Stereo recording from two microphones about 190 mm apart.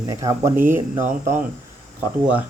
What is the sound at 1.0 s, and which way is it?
Speech, 40° right (ahead or behind).